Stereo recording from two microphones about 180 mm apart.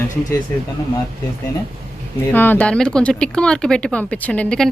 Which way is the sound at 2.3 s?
10° left (ahead or behind).